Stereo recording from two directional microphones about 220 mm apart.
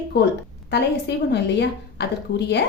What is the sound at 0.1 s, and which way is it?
A woman's voice, 50° left (ahead or behind).